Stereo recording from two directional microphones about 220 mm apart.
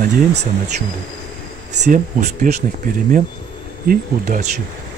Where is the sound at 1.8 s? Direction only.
35° right (ahead or behind).